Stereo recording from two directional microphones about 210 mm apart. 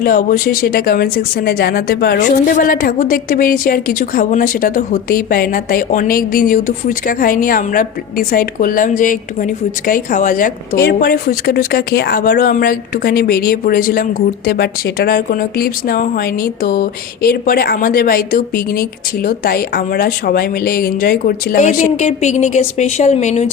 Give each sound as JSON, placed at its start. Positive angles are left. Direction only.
{"t": 0.0, "sound": "speech", "side_deg": 40}